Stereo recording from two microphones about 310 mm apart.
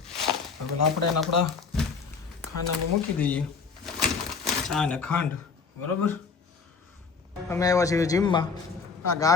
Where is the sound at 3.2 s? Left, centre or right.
Centre.